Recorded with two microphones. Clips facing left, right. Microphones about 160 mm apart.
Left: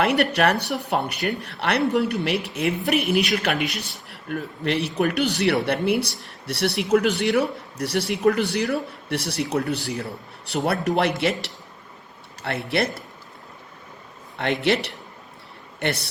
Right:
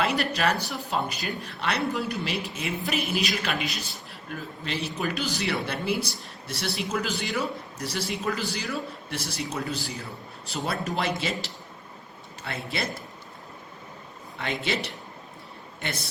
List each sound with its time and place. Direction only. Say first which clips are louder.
0.0 s speech: left 6 dB; 65° left (ahead or behind)
14.3 s speech: left 8 dB; 65° left (ahead or behind)